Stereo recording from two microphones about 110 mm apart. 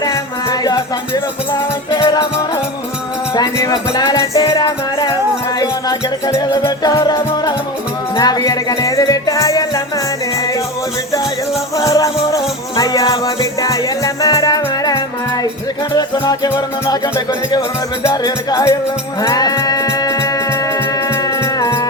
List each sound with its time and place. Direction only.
0.0 s music: 35° left (ahead or behind)
3.3 s music: 35° left (ahead or behind)
11.8 s music: 30° left (ahead or behind)